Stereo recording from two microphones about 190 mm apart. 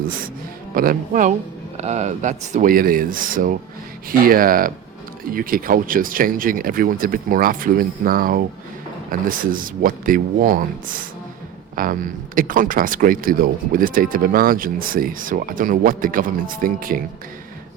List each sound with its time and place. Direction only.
0.7 s speech: 50° right (ahead or behind)
1.7 s speech: 35° right (ahead or behind)
11.7 s speech: 45° right (ahead or behind)